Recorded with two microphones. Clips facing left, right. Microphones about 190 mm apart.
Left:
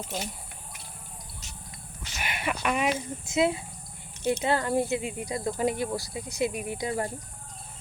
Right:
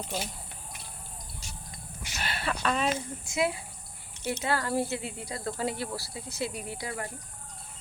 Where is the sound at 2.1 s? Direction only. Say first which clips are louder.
Left 1 dB; 15° left (ahead or behind).